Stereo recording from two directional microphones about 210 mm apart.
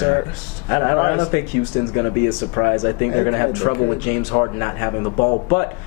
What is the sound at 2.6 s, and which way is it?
Speech, 20° left (ahead or behind).